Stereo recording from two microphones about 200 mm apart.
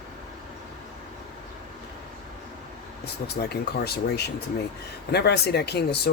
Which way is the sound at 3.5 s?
55° left (ahead or behind).